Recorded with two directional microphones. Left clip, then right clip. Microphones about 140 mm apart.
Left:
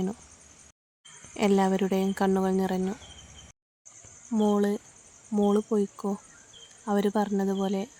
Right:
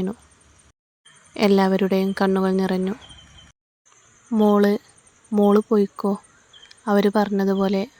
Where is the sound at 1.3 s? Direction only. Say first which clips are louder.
Right 6 dB; 35° right (ahead or behind).